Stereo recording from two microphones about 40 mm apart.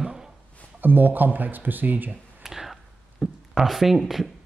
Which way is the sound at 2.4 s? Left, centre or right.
Centre.